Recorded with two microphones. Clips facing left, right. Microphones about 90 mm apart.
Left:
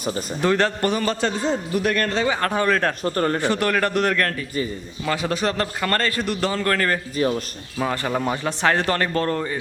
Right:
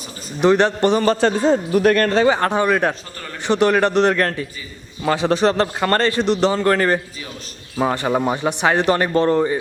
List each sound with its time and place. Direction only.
0.4 s a man's voice: 20° right (ahead or behind)
1.0 s a man's voice: 40° right (ahead or behind)
2.4 s speech: 20° right (ahead or behind)
3.0 s speech: 50° left (ahead or behind)
3.4 s a man's voice: 20° right (ahead or behind)